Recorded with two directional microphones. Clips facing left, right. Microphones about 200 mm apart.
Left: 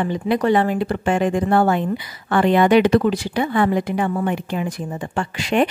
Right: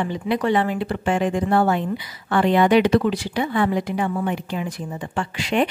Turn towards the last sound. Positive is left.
turn(degrees=50)  # may be behind; listen again after turning